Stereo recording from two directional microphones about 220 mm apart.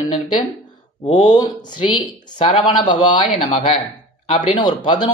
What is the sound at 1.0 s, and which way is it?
Speech, 30° left (ahead or behind).